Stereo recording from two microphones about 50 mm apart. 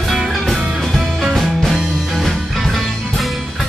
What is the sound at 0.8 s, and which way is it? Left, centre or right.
Music, centre.